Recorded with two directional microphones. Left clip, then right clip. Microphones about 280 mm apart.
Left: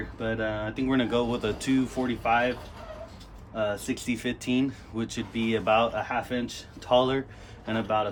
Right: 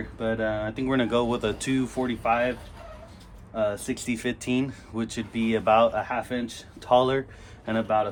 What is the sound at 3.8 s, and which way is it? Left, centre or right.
Speech, centre.